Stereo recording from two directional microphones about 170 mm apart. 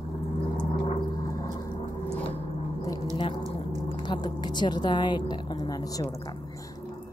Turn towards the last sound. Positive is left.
turn(degrees=20)  # may be behind; listen again after turning